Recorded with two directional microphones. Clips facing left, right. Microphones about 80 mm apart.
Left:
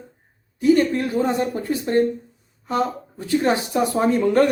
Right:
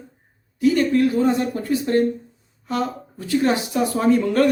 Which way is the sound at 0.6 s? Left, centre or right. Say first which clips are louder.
Even; left.